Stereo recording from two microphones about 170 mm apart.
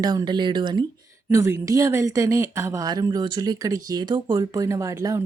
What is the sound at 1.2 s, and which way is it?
Speech, 15° right (ahead or behind).